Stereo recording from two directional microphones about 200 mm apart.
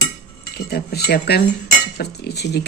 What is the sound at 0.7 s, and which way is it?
Speech, 50° left (ahead or behind).